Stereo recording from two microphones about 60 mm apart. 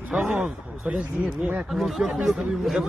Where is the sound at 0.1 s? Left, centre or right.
Centre.